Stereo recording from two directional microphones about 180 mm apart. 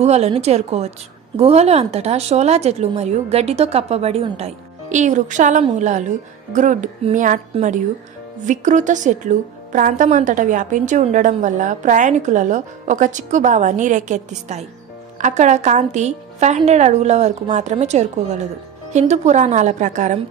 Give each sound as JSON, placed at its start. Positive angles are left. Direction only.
{"t": 0.0, "sound": "a woman's voice", "side_deg": -35}